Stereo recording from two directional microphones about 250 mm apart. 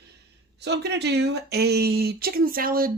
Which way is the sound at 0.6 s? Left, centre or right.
Right.